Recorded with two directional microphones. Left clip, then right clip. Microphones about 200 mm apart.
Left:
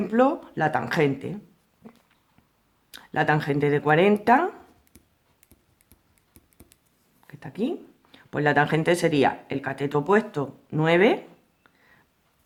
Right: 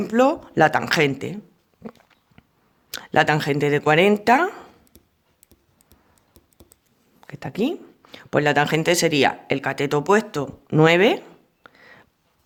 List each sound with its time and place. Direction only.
0.0 s speech: 50° right (ahead or behind)
1.8 s a sound: 40° right (ahead or behind)
2.9 s speech: 45° right (ahead or behind)
5.5 s typing: 15° right (ahead or behind)
7.2 s speech: 50° right (ahead or behind)
11.6 s a sound: 50° right (ahead or behind)